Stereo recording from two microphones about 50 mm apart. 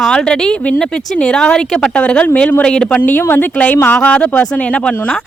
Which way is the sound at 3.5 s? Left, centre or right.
Left.